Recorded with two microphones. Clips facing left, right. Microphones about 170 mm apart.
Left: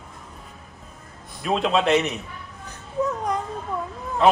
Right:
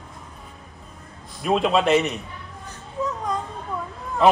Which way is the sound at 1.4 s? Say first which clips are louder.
Right 2 dB; centre (ahead or behind).